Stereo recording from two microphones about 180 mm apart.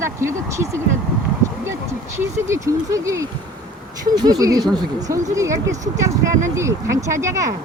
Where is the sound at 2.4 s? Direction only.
15° right (ahead or behind).